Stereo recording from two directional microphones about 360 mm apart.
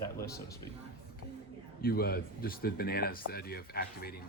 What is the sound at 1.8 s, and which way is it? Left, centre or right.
Speech, left.